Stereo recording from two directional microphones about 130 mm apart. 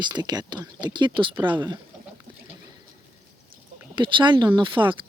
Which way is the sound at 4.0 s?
40° right (ahead or behind).